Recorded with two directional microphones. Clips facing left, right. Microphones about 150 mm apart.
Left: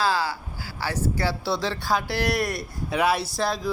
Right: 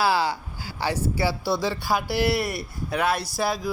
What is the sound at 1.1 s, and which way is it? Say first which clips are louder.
Speech: right 2 dB; 5° right (ahead or behind).